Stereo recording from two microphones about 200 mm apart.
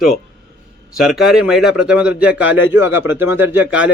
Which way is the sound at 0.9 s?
Centre (ahead or behind).